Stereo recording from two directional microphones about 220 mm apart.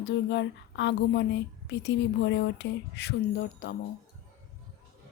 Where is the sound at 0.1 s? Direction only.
55° left (ahead or behind).